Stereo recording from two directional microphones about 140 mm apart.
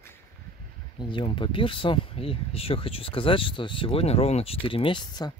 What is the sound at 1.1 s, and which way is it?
Speech, 35° left (ahead or behind).